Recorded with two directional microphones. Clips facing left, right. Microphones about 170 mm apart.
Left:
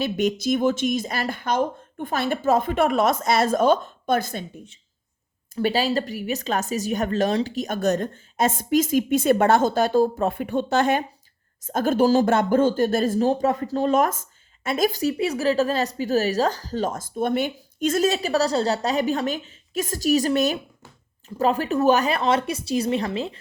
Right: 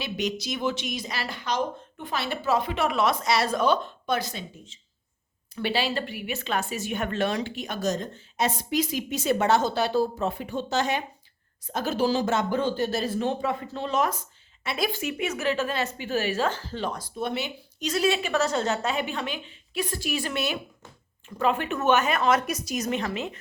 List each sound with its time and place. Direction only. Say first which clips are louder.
0.0 s speech: left 7 dB; 50° left (ahead or behind)
5.5 s speech: left 5 dB; 40° left (ahead or behind)
7.8 s speech: left 5 dB; 60° left (ahead or behind); by 23.4 s 30° left (ahead or behind)